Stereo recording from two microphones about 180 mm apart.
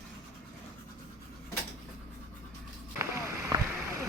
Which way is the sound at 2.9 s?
15° right (ahead or behind).